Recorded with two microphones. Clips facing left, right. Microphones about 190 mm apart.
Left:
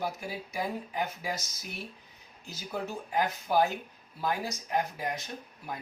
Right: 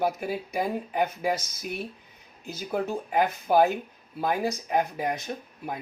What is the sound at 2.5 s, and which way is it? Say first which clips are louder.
Speech: right 7 dB; 55° right (ahead or behind).